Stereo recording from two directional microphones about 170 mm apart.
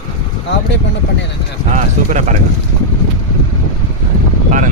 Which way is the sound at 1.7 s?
45° right (ahead or behind).